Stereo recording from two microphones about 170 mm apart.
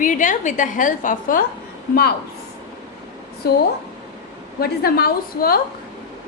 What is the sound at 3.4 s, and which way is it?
Speech, 65° left (ahead or behind).